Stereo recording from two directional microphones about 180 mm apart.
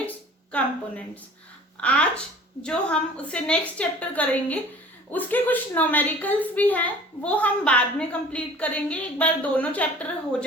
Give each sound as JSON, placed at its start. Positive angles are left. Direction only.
{"t": 0.5, "sound": "a woman's voice", "side_deg": 10}